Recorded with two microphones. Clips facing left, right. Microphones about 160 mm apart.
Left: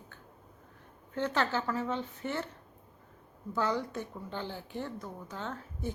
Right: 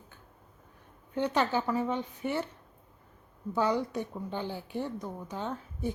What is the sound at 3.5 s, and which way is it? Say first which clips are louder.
A woman's voice: right 3 dB; 15° right (ahead or behind).